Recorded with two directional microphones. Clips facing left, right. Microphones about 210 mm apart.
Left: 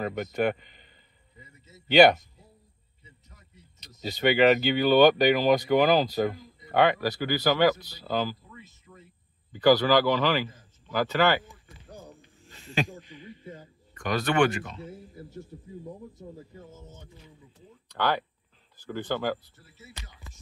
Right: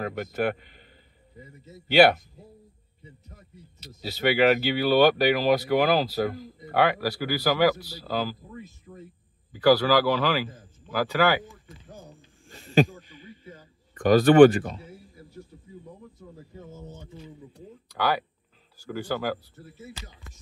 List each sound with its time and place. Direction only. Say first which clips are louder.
0.0 s speech: even; 5° right (ahead or behind)
1.9 s speech: even; 5° right (ahead or behind)
3.8 s speech: even; 5° right (ahead or behind)
8.5 s a sound: right 8 dB; 40° right (ahead or behind)
9.5 s a man's voice: right 1 dB; 5° right (ahead or behind)
12.4 s a sound: right 8 dB; 45° right (ahead or behind)
13.9 s speech: right 10 dB; 40° right (ahead or behind)
17.8 s speech: right 1 dB; 10° right (ahead or behind)